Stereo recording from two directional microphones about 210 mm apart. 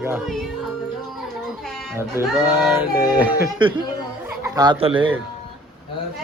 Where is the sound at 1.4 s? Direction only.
5° left (ahead or behind).